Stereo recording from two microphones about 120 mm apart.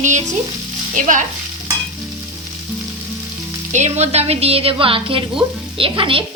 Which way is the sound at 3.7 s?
70° right (ahead or behind).